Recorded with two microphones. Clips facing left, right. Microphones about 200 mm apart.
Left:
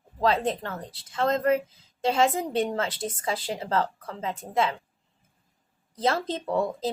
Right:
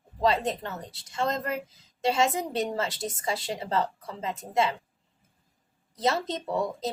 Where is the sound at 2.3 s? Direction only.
Centre (ahead or behind).